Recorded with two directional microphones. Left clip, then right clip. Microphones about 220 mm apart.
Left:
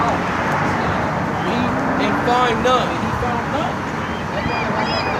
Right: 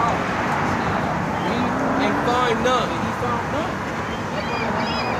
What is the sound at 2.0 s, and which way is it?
Speech, centre (ahead or behind).